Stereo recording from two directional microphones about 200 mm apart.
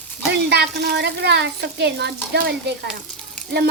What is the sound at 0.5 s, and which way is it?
Speech, 55° right (ahead or behind).